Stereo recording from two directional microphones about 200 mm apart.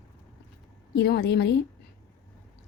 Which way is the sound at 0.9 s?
55° left (ahead or behind).